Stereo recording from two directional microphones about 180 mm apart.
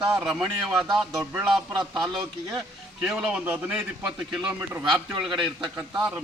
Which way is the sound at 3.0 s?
5° right (ahead or behind).